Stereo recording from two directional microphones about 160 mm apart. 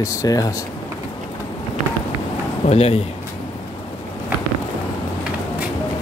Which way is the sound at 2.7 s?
40° left (ahead or behind).